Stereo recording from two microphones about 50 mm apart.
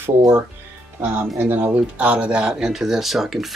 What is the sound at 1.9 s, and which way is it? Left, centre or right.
Speech, right.